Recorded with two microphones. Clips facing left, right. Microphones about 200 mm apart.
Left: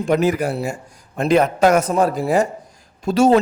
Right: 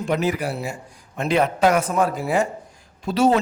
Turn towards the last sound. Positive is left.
turn(degrees=45)  # may be behind; listen again after turning